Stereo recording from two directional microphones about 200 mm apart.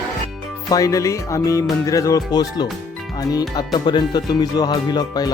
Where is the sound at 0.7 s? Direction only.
15° left (ahead or behind).